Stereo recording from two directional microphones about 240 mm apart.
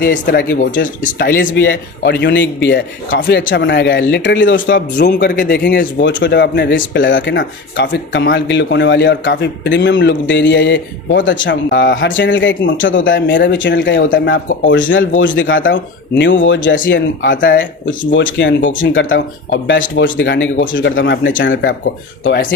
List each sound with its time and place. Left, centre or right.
0.0 s speech: left
1.5 s a man's voice: left
16.5 s speech: left
16.9 s a man's voice: left
17.4 s a man's voice: left